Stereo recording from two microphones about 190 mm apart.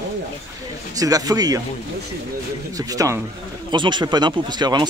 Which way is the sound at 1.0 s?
20° right (ahead or behind).